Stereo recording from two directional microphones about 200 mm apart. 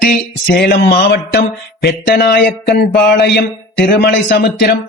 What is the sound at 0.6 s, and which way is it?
A man's voice, 55° left (ahead or behind).